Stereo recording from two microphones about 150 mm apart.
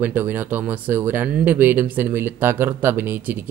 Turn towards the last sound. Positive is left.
turn(degrees=-15)  # may be behind; listen again after turning